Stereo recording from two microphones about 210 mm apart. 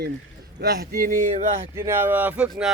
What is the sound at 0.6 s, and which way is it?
Speech, 50° right (ahead or behind).